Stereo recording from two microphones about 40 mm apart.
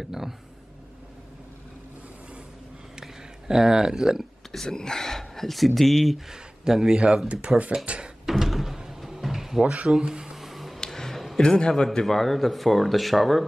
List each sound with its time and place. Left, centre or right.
0.0 s speech: centre
3.0 s a sound: centre
4.5 s speech: centre
6.1 s speech: centre
7.2 s speech: right
8.3 s door: centre
9.6 s a sound: right; by 10.8 s centre
10.9 s a sound: centre
11.4 s a man's voice: centre
12.1 s speech: centre